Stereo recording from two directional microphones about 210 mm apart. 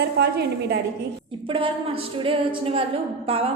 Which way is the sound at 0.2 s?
50° right (ahead or behind).